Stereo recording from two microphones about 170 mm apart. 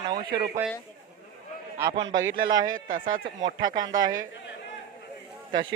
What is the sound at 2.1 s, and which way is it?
Speech, 25° right (ahead or behind).